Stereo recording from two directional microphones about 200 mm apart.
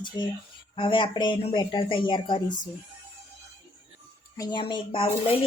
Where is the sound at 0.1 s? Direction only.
20° left (ahead or behind).